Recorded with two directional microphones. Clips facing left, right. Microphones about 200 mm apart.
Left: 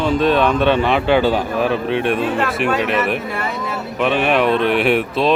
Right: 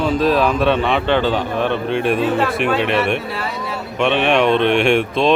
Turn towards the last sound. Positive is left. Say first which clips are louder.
# right 1 dB
turn(degrees=5)  # may be behind; listen again after turning